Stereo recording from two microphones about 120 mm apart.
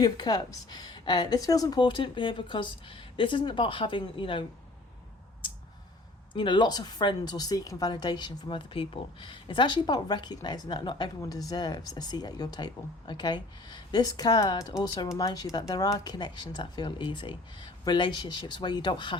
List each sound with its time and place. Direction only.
0.0 s speech: 35° left (ahead or behind)
6.3 s speech: 40° left (ahead or behind)